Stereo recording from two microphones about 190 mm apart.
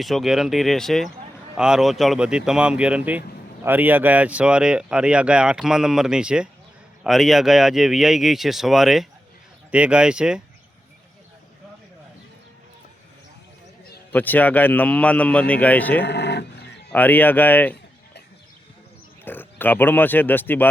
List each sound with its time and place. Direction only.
0.0 s speech: centre (ahead or behind)
14.1 s speech: 10° left (ahead or behind)
16.0 s roaring cats: 65° left (ahead or behind)
16.9 s speech: 10° left (ahead or behind)
19.2 s speech: 10° left (ahead or behind)